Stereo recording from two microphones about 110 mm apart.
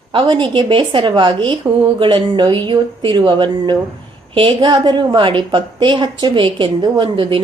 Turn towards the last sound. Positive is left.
turn(degrees=-50)  # may be behind; listen again after turning